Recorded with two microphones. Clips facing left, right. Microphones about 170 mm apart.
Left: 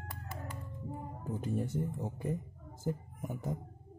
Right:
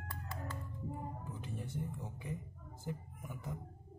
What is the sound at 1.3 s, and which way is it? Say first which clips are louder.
Speech: left 10 dB; 45° left (ahead or behind).